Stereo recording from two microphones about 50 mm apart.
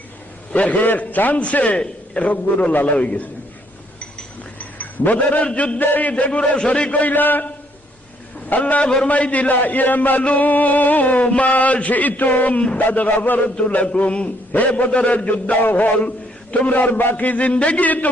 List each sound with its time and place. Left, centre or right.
0.5 s a man's voice: left
4.5 s a man's voice: left
5.8 s a man's voice: left
13.6 s a man's voice: left